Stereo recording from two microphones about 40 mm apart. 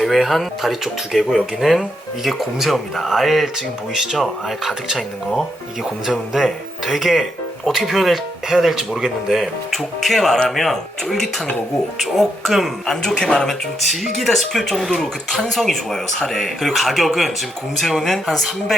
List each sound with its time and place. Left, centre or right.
0.0 s speech: centre
13.1 s speech: centre
13.9 s speech: centre